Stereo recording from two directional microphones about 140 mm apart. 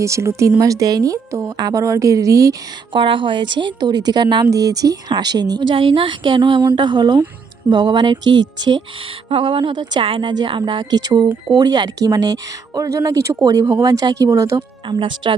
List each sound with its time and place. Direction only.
0.0 s speech: 20° right (ahead or behind)
3.0 s a woman's voice: 35° right (ahead or behind)
9.3 s a woman's voice: 35° right (ahead or behind)
14.9 s a woman's voice: 35° right (ahead or behind)